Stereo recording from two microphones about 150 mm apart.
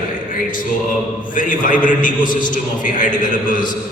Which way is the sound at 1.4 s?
60° left (ahead or behind).